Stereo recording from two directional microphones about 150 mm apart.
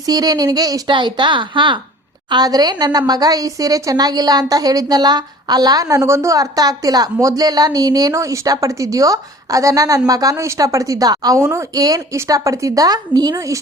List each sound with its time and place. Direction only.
0.0 s a woman's voice: 25° right (ahead or behind)